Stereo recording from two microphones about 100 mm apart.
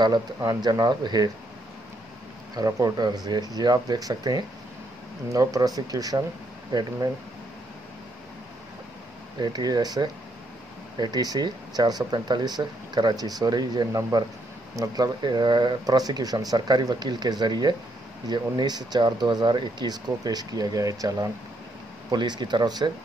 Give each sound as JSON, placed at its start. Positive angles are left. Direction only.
{"t": 0.5, "sound": "speech", "side_deg": -40}
{"t": 2.5, "sound": "speech", "side_deg": -40}
{"t": 9.4, "sound": "speech", "side_deg": -45}
{"t": 22.1, "sound": "speech", "side_deg": -45}